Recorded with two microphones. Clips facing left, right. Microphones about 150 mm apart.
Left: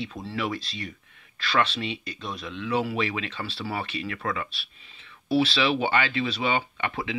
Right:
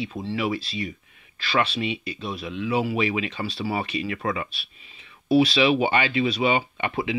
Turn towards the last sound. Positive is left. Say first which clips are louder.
# right 3 dB
turn(degrees=-15)  # may be behind; listen again after turning